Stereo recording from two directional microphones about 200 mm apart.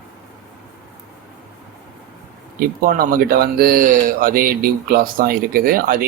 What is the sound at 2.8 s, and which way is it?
Speech, 50° right (ahead or behind).